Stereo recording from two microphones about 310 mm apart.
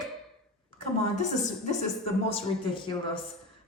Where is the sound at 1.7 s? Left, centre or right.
Centre.